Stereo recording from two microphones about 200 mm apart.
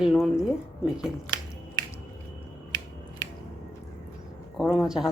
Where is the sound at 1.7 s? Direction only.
20° left (ahead or behind).